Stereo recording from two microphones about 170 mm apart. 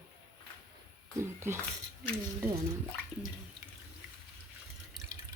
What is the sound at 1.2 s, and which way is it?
Speech, 15° right (ahead or behind).